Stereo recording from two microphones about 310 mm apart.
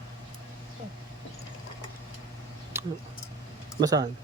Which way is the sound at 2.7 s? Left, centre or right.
Centre.